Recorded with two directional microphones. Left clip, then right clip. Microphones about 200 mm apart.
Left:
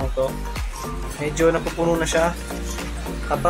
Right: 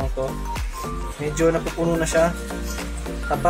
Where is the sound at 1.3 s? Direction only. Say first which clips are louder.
Left 1 dB; 20° right (ahead or behind).